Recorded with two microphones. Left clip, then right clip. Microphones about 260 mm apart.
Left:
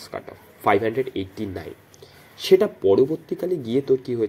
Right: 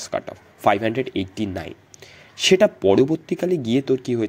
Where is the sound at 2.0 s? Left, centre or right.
Right.